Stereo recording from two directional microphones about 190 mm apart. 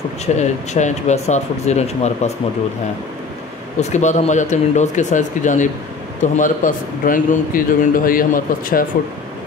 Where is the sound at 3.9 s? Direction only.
40° left (ahead or behind).